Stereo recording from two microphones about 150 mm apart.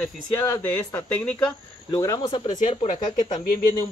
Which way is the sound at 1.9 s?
25° left (ahead or behind).